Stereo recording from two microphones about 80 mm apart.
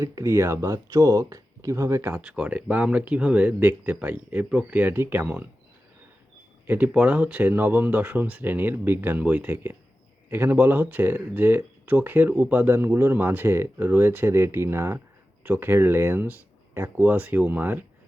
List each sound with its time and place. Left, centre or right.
0.0 s speech: right
2.1 s speech: centre
6.7 s speech: centre